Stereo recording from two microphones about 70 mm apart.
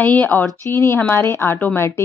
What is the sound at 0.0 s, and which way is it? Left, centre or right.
Speech, left.